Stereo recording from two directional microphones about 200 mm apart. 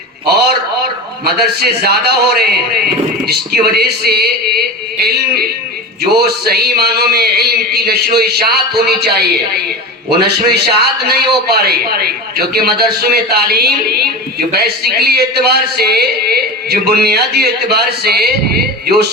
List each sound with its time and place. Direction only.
0.3 s a sound: 55° right (ahead or behind)
1.2 s a man's voice: 50° right (ahead or behind)
10.1 s a man's voice: 55° right (ahead or behind)